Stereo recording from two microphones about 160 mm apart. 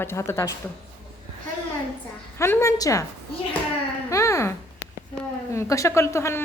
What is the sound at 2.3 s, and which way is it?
Speech, 15° left (ahead or behind).